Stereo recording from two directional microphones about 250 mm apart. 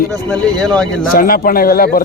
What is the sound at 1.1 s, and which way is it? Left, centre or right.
Speech, left.